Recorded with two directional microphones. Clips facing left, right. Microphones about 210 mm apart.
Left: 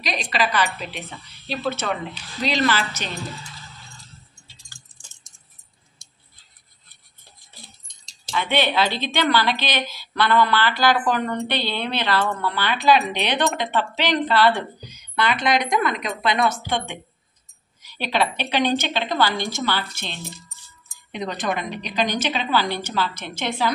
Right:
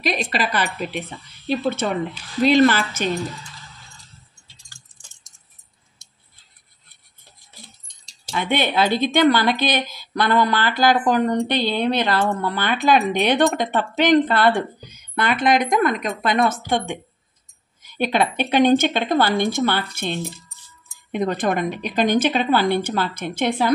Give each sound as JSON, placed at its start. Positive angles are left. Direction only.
{"t": 0.0, "sound": "speech", "side_deg": -50}
{"t": 8.4, "sound": "speech", "side_deg": -50}